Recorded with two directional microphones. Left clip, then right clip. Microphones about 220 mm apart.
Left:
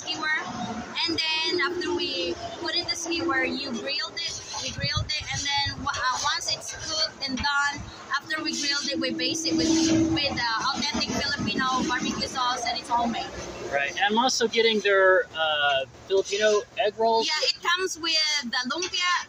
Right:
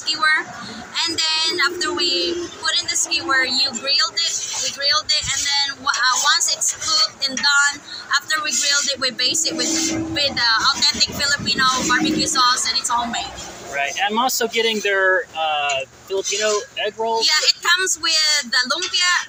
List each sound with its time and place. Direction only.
0.0 s a sound: 10° left (ahead or behind)
3.6 s speech: 15° left (ahead or behind)
4.8 s a sound: 15° left (ahead or behind)
7.2 s speech: 15° left (ahead or behind)
13.7 s speech: 15° right (ahead or behind)
17.2 s speech: 15° left (ahead or behind)